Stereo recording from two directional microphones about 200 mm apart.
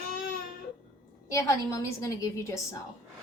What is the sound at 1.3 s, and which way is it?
A woman's voice, 15° left (ahead or behind).